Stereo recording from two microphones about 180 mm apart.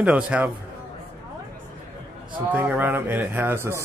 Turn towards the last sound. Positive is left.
turn(degrees=-15)  # may be behind; listen again after turning